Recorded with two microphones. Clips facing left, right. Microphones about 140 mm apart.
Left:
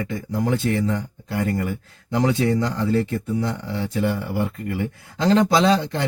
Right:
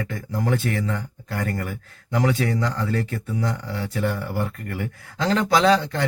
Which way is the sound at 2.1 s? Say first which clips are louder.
Left 3 dB; 25° left (ahead or behind).